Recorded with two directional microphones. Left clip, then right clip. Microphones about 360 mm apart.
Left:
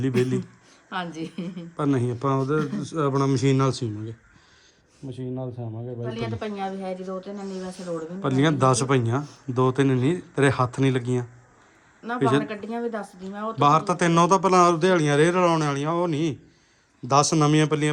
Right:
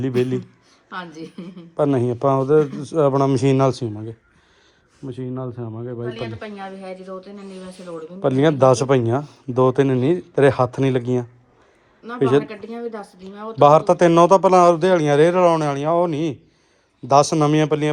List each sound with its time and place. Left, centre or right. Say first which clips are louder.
0.0 s a man's voice: right 3 dB; centre
1.1 s speech: left 1 dB; centre
1.7 s a man's voice: right 7 dB; centre
4.9 s speech: right 6 dB; centre
5.2 s speech: right 3 dB; right
6.1 s speech: right 1 dB; left
7.1 s a man's voice: left 1 dB; centre
12.0 s speech: right 5 dB; centre
13.7 s a man's voice: right 7 dB; centre